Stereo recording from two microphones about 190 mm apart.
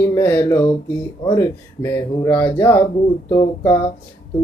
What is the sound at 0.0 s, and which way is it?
Speech, 10° left (ahead or behind).